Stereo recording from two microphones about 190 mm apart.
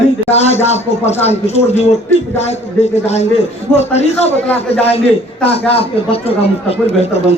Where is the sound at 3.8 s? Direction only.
35° left (ahead or behind).